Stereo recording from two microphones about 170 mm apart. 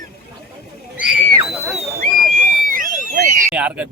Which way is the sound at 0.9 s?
10° right (ahead or behind).